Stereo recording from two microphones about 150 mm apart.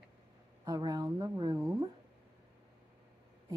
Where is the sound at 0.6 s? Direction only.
25° right (ahead or behind).